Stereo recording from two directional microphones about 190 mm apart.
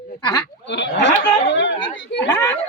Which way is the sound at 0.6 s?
70° left (ahead or behind).